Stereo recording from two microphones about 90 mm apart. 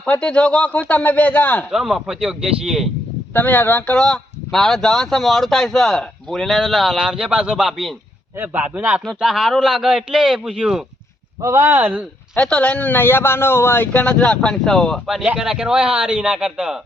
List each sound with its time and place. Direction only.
0.0 s speech: 10° left (ahead or behind)
1.7 s speech: 5° right (ahead or behind)
3.3 s speech: 20° left (ahead or behind); by 7.9 s centre (ahead or behind)
8.5 s speech: 20° right (ahead or behind)
9.0 s speech: centre (ahead or behind)
11.6 s speech: 20° right (ahead or behind)
12.4 s speech: 15° left (ahead or behind); by 16.8 s 5° right (ahead or behind)